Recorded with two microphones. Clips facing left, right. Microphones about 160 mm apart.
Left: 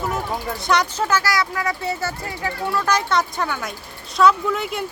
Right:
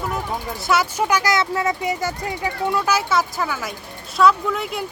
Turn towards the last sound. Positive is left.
turn(degrees=0)  # may be behind; listen again after turning